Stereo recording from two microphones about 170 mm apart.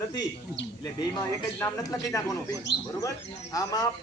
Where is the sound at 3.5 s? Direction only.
20° left (ahead or behind).